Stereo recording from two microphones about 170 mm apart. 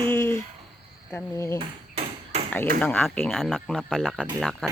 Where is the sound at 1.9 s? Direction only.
40° right (ahead or behind).